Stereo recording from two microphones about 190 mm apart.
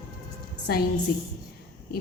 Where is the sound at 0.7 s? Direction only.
55° left (ahead or behind).